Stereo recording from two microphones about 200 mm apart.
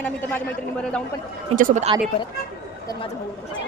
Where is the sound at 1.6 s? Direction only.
40° right (ahead or behind).